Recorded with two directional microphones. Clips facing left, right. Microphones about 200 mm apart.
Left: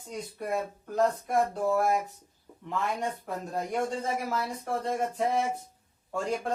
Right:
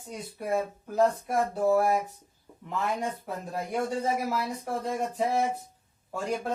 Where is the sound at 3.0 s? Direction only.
5° right (ahead or behind).